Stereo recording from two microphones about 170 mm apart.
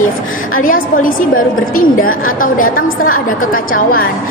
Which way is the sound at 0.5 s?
55° left (ahead or behind).